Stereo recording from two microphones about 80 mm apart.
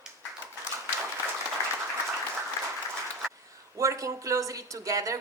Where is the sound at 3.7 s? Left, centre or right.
Right.